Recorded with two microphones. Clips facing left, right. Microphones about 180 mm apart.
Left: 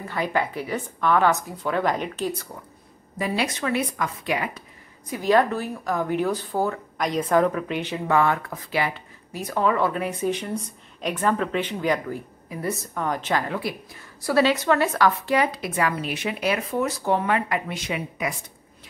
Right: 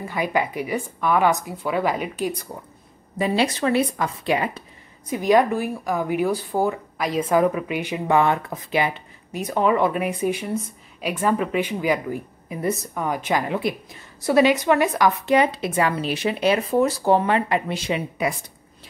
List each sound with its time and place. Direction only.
0.0 s speech: 10° right (ahead or behind)
3.2 s speech: 25° right (ahead or behind)
5.1 s speech: 15° right (ahead or behind)